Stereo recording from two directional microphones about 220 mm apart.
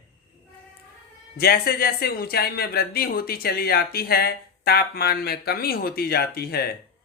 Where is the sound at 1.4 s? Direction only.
45° left (ahead or behind).